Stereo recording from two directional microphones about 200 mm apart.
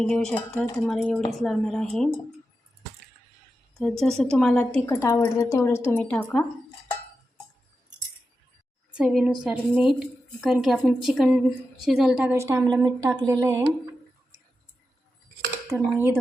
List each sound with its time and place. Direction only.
0.0 s a woman's voice: 5° left (ahead or behind)
3.8 s a woman's voice: centre (ahead or behind)
9.0 s a woman's voice: 5° right (ahead or behind)
15.6 s speech: 15° right (ahead or behind)